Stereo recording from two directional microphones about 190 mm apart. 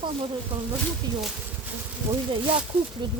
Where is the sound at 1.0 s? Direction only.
20° right (ahead or behind).